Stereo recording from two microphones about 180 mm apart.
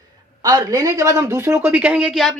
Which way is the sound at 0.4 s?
20° right (ahead or behind).